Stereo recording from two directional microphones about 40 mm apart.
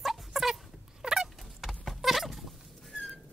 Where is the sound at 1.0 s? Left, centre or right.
Centre.